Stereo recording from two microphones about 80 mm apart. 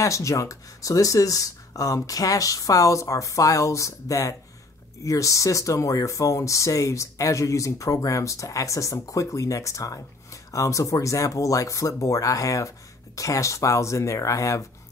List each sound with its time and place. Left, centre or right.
0.0 s speech: left